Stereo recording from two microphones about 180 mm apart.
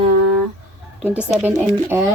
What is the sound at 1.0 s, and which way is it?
A woman's voice, 5° right (ahead or behind).